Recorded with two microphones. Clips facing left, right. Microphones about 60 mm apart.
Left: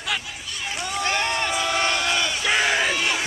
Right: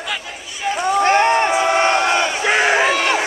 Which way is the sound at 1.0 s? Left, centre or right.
Right.